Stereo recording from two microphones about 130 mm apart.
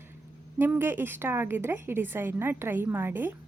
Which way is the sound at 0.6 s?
15° right (ahead or behind).